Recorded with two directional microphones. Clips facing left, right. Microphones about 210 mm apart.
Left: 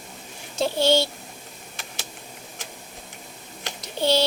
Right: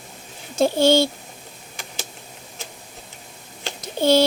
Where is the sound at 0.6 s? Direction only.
50° right (ahead or behind).